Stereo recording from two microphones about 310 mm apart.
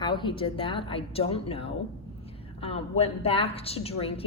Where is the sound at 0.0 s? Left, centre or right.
Centre.